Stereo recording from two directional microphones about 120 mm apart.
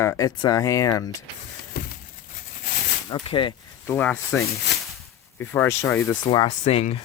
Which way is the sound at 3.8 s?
15° left (ahead or behind).